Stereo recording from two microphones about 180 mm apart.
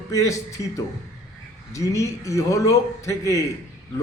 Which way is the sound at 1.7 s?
20° left (ahead or behind).